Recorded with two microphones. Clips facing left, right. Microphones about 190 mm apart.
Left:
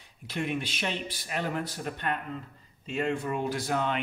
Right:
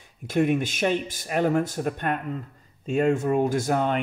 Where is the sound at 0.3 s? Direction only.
45° right (ahead or behind).